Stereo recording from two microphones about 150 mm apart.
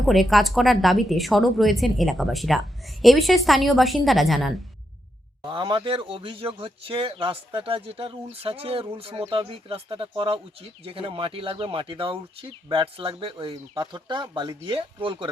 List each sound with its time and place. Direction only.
0.0 s speech: centre (ahead or behind)
5.4 s speech: 30° right (ahead or behind)